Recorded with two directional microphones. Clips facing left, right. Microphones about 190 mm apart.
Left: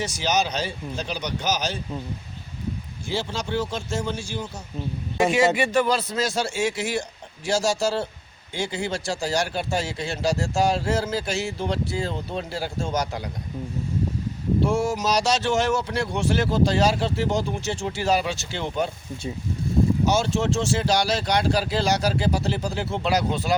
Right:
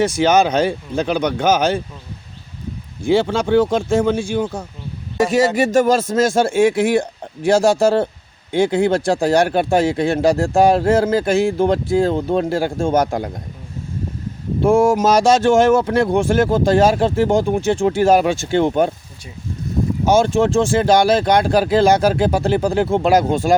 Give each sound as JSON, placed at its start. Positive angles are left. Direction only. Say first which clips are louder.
{"t": 0.0, "sound": "speech", "louder": "right 10 dB", "side_deg": -55}
{"t": 3.0, "sound": "speech", "louder": "right 13 dB", "side_deg": -55}
{"t": 5.1, "sound": "speech", "louder": "right 5 dB", "side_deg": -40}
{"t": 14.6, "sound": "speech", "louder": "right 11 dB", "side_deg": -55}
{"t": 20.1, "sound": "speech", "louder": "right 8 dB", "side_deg": -55}